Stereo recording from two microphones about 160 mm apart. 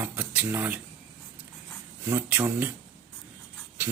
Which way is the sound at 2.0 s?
10° right (ahead or behind).